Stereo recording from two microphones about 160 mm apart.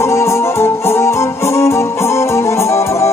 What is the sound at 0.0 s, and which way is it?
Music, 15° left (ahead or behind).